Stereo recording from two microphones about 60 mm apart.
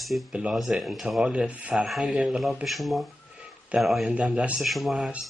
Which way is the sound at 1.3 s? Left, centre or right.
Right.